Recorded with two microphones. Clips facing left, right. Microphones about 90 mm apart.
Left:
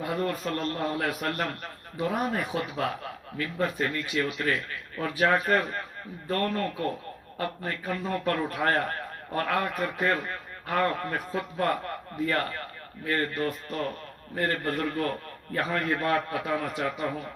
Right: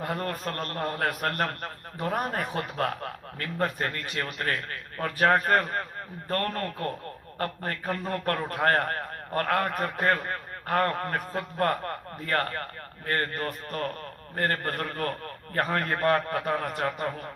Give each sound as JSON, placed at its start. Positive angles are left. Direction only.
{"t": 0.0, "sound": "a man's voice", "side_deg": -45}